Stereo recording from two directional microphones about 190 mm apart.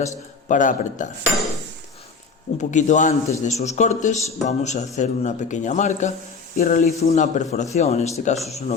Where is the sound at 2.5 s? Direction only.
40° left (ahead or behind).